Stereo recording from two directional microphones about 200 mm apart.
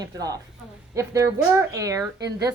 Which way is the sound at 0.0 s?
20° right (ahead or behind).